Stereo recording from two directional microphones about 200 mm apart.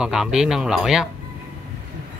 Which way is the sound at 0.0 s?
5° right (ahead or behind).